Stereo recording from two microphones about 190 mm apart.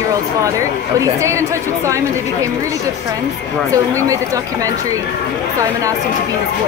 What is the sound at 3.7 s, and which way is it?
Speech, 15° right (ahead or behind).